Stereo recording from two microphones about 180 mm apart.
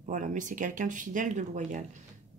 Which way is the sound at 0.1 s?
45° right (ahead or behind).